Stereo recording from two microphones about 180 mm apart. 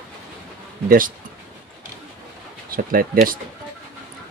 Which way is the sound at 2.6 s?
55° right (ahead or behind).